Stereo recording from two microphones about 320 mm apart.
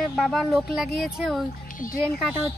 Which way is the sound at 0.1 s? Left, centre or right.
Centre.